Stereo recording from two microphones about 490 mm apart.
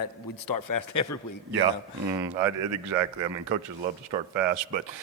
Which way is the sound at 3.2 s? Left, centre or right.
Right.